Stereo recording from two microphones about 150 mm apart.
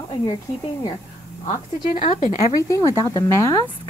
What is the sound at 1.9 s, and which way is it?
Speech, 55° left (ahead or behind).